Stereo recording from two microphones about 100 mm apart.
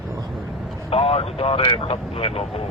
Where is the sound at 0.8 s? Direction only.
80° left.